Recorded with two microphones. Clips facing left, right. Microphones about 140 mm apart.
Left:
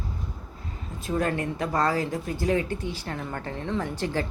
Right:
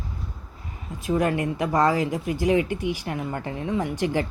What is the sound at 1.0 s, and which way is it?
Speech, 15° right (ahead or behind).